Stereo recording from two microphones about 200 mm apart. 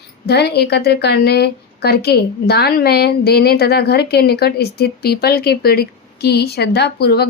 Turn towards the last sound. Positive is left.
turn(degrees=55)  # may be behind; listen again after turning